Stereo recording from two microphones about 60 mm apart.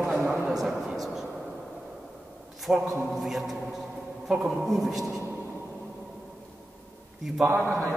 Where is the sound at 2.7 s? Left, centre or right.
Centre.